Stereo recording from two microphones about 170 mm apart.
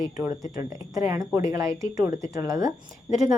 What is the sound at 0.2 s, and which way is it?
Speech, 20° right (ahead or behind).